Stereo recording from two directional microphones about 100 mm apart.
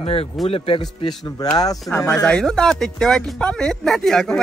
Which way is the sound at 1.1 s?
40° left (ahead or behind).